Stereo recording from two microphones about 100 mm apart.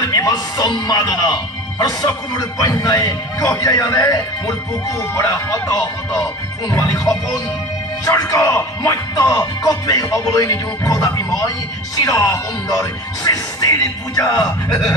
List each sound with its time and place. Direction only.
0.1 s speech: 35° left (ahead or behind)
8.0 s speech: 35° left (ahead or behind)